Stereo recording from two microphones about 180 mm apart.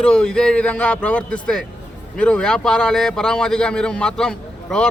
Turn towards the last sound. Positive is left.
turn(degrees=5)  # may be behind; listen again after turning